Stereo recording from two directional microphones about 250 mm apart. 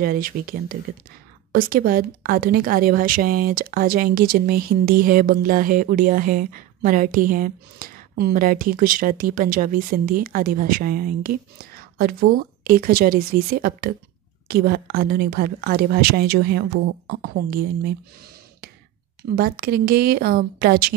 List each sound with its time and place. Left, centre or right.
0.0 s a woman's voice: right
19.3 s a woman's voice: right